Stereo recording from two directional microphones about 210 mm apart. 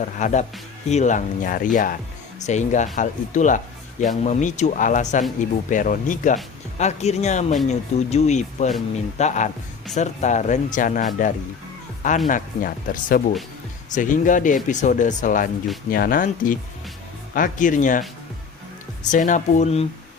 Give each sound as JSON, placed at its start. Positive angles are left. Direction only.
{"t": 0.2, "sound": "speech", "side_deg": 35}
{"t": 19.1, "sound": "speech", "side_deg": 35}